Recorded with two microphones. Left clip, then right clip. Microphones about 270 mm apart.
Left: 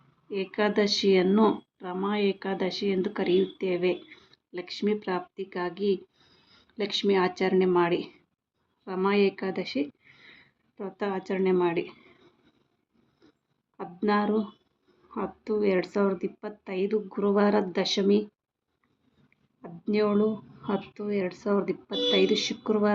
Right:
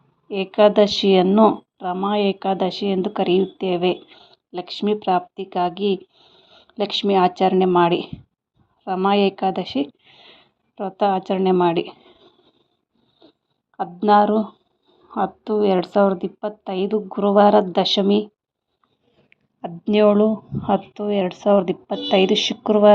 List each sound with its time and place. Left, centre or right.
0.3 s speech: right
6.1 s a sound: centre
6.7 s speech: right
13.7 s speech: right
19.6 s speech: right